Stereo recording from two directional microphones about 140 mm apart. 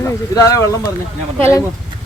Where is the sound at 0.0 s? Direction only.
20° left (ahead or behind).